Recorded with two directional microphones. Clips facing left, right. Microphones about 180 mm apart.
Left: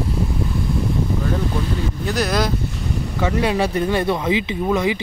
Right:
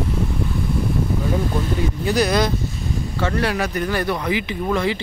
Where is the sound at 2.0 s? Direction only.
Centre (ahead or behind).